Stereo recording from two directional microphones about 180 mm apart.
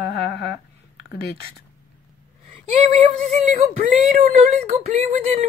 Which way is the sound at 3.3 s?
40° right (ahead or behind).